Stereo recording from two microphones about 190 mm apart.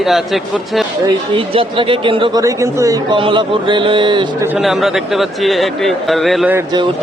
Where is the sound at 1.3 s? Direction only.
25° right (ahead or behind).